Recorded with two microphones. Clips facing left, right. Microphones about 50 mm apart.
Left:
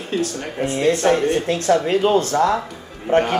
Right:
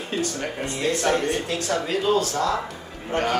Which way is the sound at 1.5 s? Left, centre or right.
Left.